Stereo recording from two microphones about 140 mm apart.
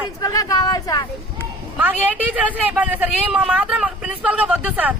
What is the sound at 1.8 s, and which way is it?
Speech, 10° right (ahead or behind).